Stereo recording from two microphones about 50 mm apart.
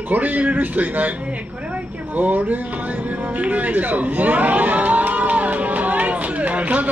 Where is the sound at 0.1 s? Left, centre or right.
Right.